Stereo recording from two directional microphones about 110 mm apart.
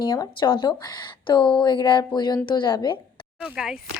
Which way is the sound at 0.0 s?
40° left (ahead or behind).